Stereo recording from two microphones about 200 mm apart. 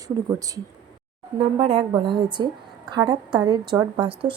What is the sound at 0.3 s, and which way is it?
A woman's voice, 15° right (ahead or behind).